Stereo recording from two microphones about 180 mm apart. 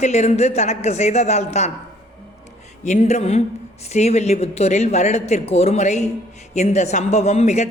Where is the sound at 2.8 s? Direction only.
40° left (ahead or behind).